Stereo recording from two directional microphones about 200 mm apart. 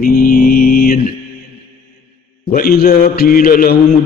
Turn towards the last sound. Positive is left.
turn(degrees=45)  # may be behind; listen again after turning